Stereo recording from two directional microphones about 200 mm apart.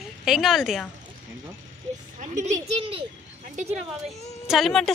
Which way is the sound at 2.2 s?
40° right (ahead or behind).